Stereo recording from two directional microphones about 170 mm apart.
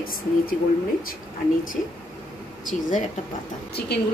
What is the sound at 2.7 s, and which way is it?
Speech, 50° left (ahead or behind).